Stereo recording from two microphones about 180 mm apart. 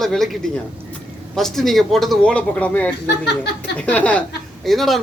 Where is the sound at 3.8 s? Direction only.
5° left (ahead or behind).